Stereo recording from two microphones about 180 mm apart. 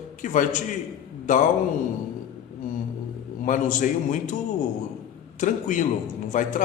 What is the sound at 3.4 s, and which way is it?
Speech, 45° left (ahead or behind).